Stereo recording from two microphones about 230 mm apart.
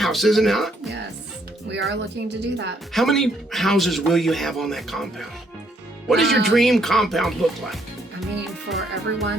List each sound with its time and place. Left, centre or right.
0.0 s speech: centre
2.0 s a woman's voice: right
2.9 s speech: centre